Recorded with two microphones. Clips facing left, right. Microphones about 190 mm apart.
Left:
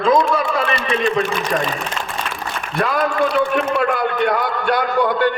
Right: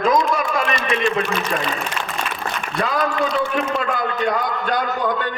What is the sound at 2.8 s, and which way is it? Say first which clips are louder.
A man's voice: left 3 dB; 55° left (ahead or behind).